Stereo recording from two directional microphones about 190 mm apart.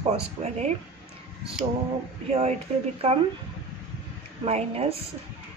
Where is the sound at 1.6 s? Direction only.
25° right (ahead or behind).